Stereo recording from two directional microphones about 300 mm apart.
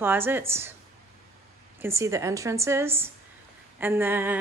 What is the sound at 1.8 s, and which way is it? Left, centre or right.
Speech, centre.